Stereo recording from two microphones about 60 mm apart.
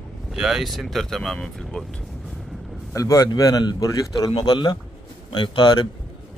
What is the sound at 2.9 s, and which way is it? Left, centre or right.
A man's voice, left.